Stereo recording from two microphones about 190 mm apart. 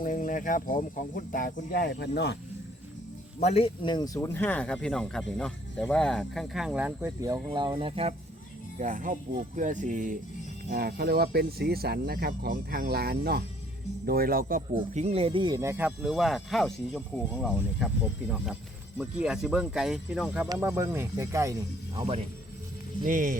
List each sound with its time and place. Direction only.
0.0 s speech: 45° left (ahead or behind); by 2.4 s 60° left (ahead or behind)
3.4 s speech: 30° left (ahead or behind); by 8.1 s 30° right (ahead or behind)
8.8 s speech: 45° right (ahead or behind)
14.9 s speech: 35° right (ahead or behind); by 17.8 s 5° right (ahead or behind)
18.9 s speech: 5° right (ahead or behind)
21.9 s speech: 30° right (ahead or behind)
23.0 s speech: 45° right (ahead or behind)